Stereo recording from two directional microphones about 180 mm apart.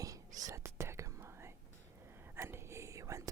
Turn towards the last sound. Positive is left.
turn(degrees=-15)  # may be behind; listen again after turning